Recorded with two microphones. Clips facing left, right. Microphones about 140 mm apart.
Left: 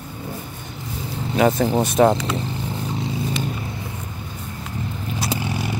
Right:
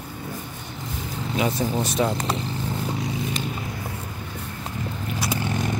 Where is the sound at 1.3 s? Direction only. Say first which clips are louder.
Left 7 dB; 50° left (ahead or behind).